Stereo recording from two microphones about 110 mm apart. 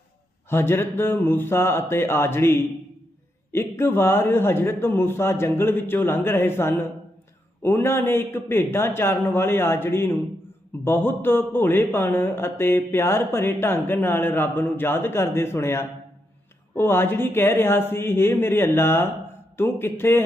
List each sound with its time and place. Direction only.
0.5 s a man's voice: 20° left (ahead or behind)